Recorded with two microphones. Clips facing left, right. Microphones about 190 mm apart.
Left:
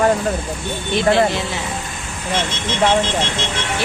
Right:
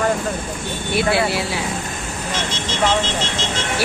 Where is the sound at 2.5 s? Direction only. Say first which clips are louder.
Left 2 dB; 55° left (ahead or behind).